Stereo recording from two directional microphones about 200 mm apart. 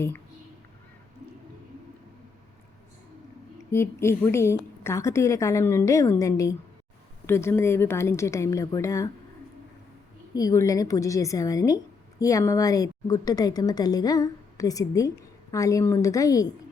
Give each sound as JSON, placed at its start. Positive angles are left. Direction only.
{"t": 3.6, "sound": "a woman's voice", "side_deg": 15}
{"t": 10.3, "sound": "a woman's voice", "side_deg": 15}